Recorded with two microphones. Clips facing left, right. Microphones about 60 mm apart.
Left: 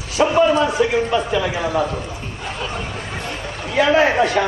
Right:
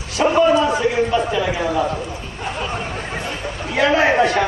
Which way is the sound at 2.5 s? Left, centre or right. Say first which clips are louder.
Right 2 dB; centre.